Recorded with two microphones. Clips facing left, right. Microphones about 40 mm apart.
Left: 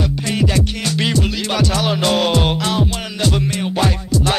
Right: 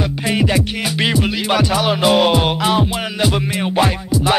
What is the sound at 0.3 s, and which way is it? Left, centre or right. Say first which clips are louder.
Music: right 2 dB; centre.